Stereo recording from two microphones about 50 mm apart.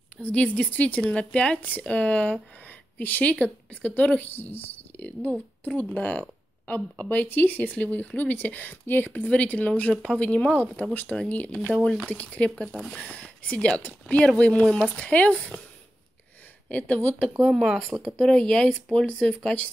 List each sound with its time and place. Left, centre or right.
0.2 s speech: left
4.3 s speech: left
10.8 s speech: left
11.7 s speech: centre
12.1 s speech: left
16.6 s speech: left
17.5 s speech: centre
18.2 s speech: centre